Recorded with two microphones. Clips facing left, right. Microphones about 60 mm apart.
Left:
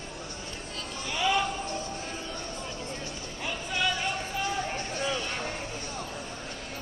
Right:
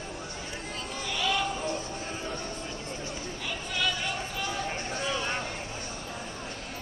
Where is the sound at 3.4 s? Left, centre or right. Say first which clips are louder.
Left 2 dB; centre.